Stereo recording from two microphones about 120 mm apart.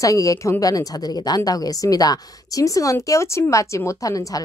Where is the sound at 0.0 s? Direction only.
30° left (ahead or behind).